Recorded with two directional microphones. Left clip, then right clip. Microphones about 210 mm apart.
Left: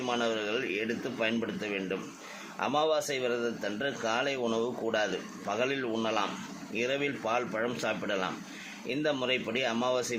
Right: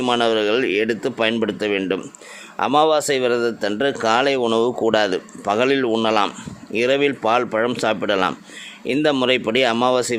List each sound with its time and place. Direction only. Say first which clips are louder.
0.0 s speech: right 13 dB; 45° right (ahead or behind)